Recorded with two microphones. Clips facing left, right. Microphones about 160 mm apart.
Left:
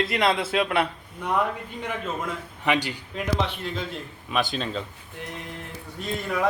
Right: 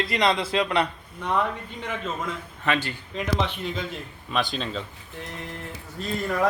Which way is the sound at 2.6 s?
15° left (ahead or behind).